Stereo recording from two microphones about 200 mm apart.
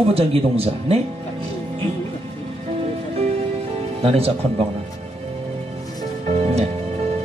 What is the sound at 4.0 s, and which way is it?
Speech, 30° right (ahead or behind).